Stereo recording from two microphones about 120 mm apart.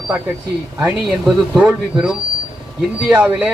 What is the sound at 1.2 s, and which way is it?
Speech, 5° right (ahead or behind).